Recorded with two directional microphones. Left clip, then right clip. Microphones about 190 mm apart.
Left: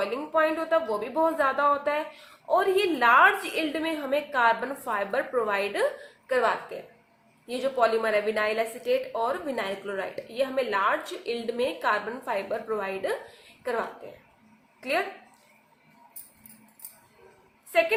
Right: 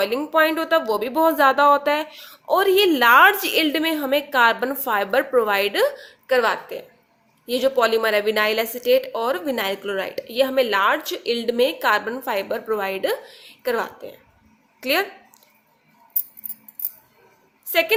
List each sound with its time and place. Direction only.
0.0 s a woman's voice: 55° right (ahead or behind)
17.7 s a woman's voice: 55° right (ahead or behind)